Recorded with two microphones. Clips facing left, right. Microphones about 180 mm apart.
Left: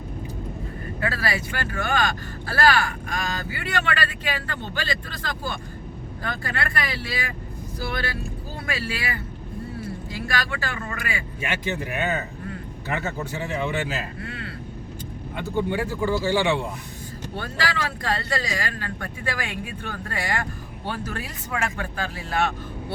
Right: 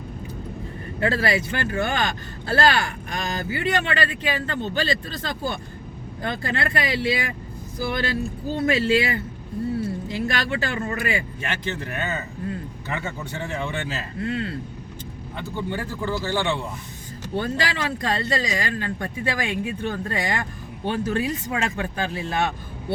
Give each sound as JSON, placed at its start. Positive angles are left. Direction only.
{"t": 0.9, "sound": "speech", "side_deg": -25}
{"t": 8.5, "sound": "speech", "side_deg": -25}
{"t": 11.3, "sound": "speech", "side_deg": 10}
{"t": 13.3, "sound": "speech", "side_deg": 5}
{"t": 14.2, "sound": "speech", "side_deg": -25}
{"t": 15.5, "sound": "speech", "side_deg": 10}
{"t": 17.3, "sound": "speech", "side_deg": -20}